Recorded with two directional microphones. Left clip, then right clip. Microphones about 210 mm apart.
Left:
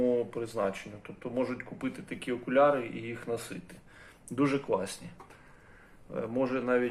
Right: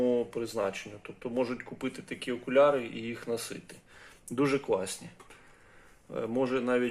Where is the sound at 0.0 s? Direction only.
45° right (ahead or behind).